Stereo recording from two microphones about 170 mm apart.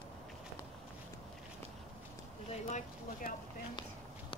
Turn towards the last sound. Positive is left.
turn(degrees=45)  # may be behind; listen again after turning